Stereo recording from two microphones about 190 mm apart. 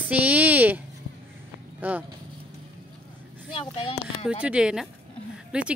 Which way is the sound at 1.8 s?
10° right (ahead or behind).